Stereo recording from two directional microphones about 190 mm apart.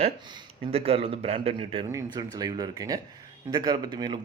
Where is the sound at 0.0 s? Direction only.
25° right (ahead or behind).